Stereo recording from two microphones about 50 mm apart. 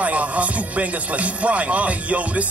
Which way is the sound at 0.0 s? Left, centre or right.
Right.